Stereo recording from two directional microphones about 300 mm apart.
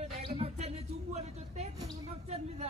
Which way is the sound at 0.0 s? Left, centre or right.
Centre.